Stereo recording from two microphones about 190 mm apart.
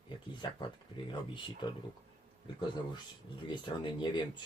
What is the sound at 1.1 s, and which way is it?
Speech, 25° left (ahead or behind).